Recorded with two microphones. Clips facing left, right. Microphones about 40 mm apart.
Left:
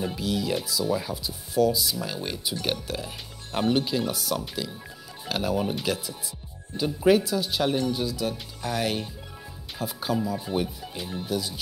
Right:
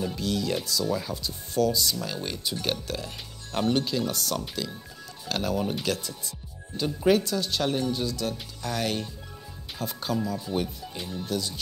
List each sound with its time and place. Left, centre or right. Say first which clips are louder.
0.1 s speech: left 1 dB; centre